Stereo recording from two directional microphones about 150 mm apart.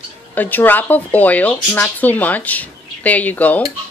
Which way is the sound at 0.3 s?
10° left (ahead or behind).